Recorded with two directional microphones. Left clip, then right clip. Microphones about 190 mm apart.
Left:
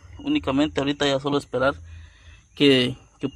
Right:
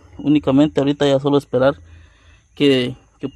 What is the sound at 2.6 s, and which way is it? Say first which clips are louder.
Speech: right 2 dB; 15° right (ahead or behind).